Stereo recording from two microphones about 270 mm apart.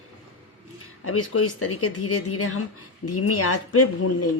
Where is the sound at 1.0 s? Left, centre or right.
Left.